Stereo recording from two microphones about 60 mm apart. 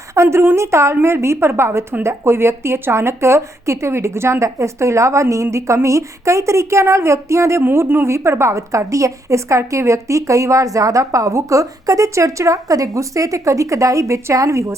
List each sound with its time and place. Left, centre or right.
0.1 s a woman's voice: right
7.6 s a woman's voice: right